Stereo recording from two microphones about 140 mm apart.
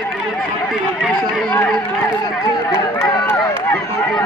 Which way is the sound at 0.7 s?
Centre (ahead or behind).